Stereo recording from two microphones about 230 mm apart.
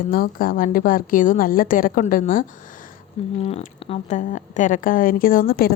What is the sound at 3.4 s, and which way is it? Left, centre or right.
A woman's voice, left.